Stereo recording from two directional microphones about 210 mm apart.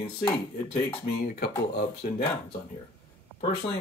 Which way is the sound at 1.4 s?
50° left (ahead or behind).